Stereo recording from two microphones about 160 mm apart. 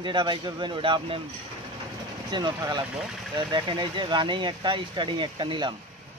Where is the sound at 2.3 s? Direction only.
25° right (ahead or behind).